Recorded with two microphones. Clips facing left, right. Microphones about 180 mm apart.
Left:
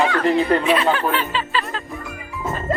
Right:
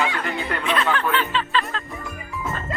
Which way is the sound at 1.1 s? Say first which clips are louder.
Even; 5° left (ahead or behind).